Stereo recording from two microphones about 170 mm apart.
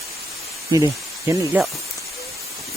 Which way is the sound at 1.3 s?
15° right (ahead or behind).